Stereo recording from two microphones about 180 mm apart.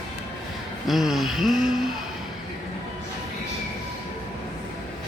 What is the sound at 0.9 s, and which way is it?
Speech, centre (ahead or behind).